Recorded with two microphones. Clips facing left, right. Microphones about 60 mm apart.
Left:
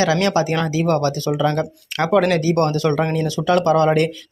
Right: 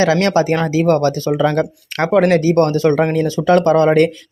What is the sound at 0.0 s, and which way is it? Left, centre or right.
Speech, right.